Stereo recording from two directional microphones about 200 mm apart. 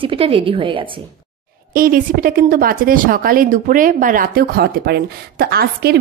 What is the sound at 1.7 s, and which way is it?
A woman's voice, 45° right (ahead or behind).